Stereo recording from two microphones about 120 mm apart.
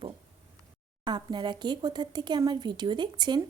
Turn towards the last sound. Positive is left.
turn(degrees=-40)  # may be behind; listen again after turning